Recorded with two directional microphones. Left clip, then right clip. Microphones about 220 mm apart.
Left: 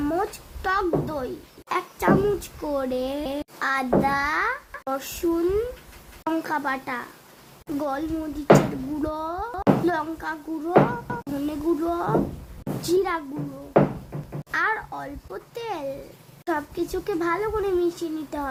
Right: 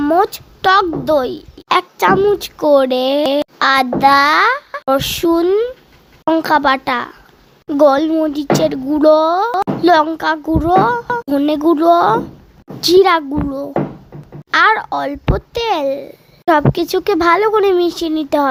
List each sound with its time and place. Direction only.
0.0 s a woman's voice: 40° right (ahead or behind)
14.5 s speech: 40° right (ahead or behind)